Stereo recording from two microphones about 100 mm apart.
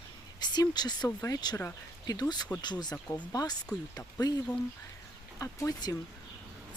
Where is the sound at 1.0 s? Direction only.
35° left (ahead or behind).